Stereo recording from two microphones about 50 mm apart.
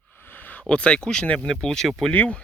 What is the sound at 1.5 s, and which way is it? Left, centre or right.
Speech, centre.